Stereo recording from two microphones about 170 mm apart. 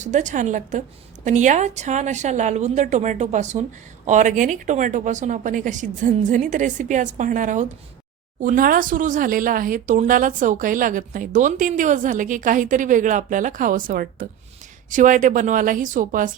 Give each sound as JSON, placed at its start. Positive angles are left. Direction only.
{"t": 0.0, "sound": "a woman's voice", "side_deg": -45}